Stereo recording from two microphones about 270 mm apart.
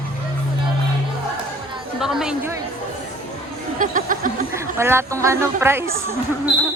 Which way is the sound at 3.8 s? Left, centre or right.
Right.